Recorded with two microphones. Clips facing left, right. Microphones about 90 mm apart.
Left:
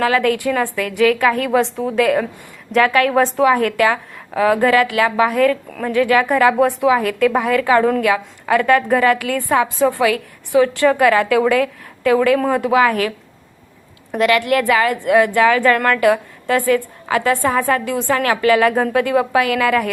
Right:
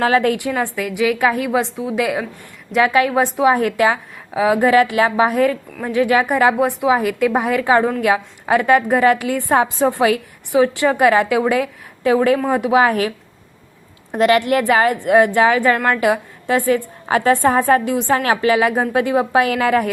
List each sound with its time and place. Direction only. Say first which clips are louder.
0.0 s a woman's voice: even; 30° right (ahead or behind); by 3.4 s 10° right (ahead or behind)
3.4 s a woman's voice: right 1 dB; 20° right (ahead or behind)